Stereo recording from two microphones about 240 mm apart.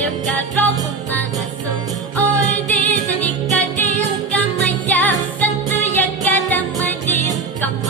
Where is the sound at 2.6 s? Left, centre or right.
Centre.